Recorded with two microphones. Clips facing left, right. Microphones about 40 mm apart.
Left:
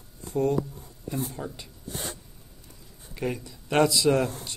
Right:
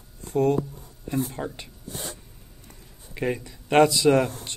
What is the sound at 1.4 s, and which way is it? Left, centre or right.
Speech, right.